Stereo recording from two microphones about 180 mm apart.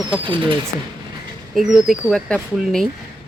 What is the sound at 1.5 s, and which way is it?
Speech, centre (ahead or behind).